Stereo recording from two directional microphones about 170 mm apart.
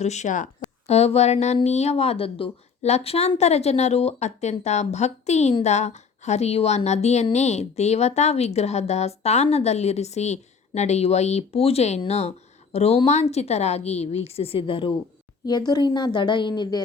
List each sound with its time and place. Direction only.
0.0 s a woman's voice: 40° left (ahead or behind); by 16.8 s 25° left (ahead or behind)